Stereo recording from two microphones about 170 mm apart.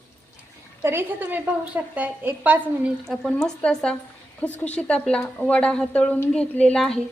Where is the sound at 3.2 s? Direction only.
5° left (ahead or behind).